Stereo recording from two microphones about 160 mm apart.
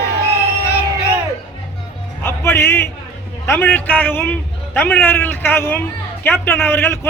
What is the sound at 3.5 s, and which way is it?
A man's voice, 10° left (ahead or behind).